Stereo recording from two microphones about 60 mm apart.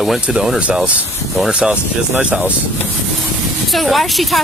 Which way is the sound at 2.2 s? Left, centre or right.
Right.